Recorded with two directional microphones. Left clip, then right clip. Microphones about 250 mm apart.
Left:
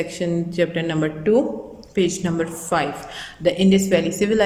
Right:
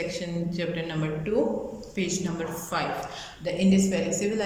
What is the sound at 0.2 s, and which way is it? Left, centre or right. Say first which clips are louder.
A woman's voice: left 11 dB; left.